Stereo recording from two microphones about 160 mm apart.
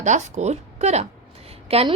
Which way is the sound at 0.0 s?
45° right (ahead or behind).